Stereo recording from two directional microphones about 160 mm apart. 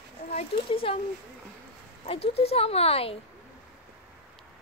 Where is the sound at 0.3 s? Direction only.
40° left (ahead or behind).